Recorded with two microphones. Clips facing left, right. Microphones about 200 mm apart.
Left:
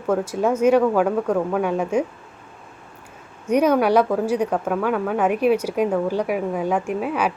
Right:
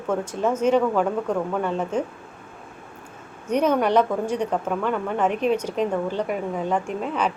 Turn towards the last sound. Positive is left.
turn(degrees=10)  # may be behind; listen again after turning